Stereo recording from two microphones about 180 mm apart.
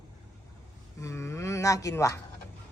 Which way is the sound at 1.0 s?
15° left (ahead or behind).